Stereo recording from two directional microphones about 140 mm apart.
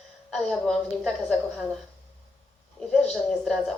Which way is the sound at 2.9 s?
5° left (ahead or behind).